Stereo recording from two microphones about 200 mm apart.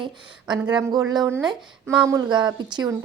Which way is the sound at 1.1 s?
20° right (ahead or behind).